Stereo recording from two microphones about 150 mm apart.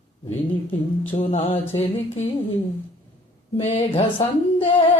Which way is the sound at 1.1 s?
40° left (ahead or behind).